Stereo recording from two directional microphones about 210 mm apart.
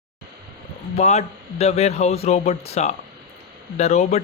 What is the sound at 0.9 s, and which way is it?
Speech, 30° left (ahead or behind).